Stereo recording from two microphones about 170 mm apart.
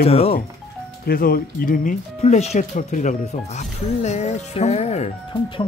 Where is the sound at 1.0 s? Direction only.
60° left (ahead or behind); by 5.1 s 40° left (ahead or behind).